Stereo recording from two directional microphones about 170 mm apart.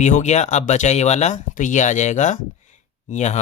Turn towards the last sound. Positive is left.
turn(degrees=40)  # may be behind; listen again after turning